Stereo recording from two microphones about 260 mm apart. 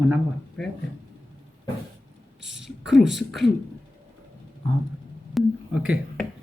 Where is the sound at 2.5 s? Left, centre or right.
Centre.